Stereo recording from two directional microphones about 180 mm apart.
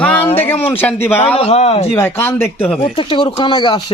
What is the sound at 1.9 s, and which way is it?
Speech, 10° left (ahead or behind).